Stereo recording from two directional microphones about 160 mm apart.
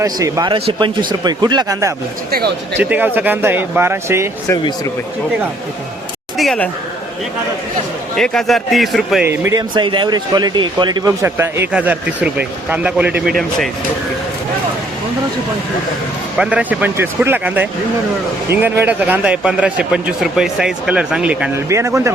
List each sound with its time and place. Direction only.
0.0 s speech: 20° right (ahead or behind)
2.7 s speech: 10° right (ahead or behind)
4.4 s speech: 20° left (ahead or behind)
6.3 s speech: centre (ahead or behind)
8.1 s a man's voice: 5° left (ahead or behind)
9.2 s speech: 15° right (ahead or behind)
9.7 s speech: 30° right (ahead or behind); by 13.3 s 10° right (ahead or behind)
16.4 s speech: 10° right (ahead or behind)
21.7 s speech: 20° right (ahead or behind)